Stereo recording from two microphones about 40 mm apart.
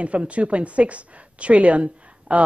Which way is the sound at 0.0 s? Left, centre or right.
Right.